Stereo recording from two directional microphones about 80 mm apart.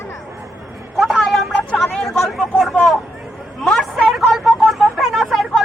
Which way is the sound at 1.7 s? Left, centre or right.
Centre.